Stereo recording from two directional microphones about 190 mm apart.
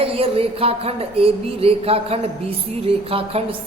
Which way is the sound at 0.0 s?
30° right (ahead or behind).